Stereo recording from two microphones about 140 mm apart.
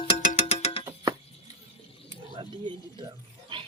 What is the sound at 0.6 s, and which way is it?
Music, 40° left (ahead or behind).